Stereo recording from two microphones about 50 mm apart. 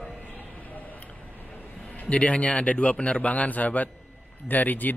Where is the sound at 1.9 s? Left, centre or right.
Left.